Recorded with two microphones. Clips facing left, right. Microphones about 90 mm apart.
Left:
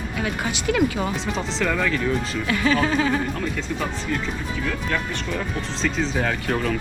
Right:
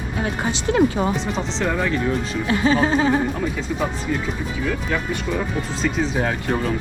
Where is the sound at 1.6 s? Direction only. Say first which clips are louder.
Right 1 dB; 20° right (ahead or behind).